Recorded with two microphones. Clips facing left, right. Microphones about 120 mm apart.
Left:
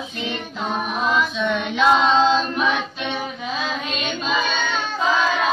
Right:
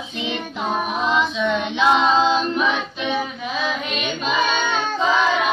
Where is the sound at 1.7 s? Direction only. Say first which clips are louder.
Left 1 dB; 5° right (ahead or behind).